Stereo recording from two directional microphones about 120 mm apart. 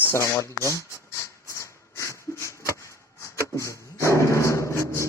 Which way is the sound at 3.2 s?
25° left (ahead or behind).